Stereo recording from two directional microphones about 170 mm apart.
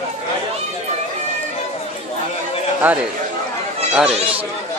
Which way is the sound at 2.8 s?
10° right (ahead or behind).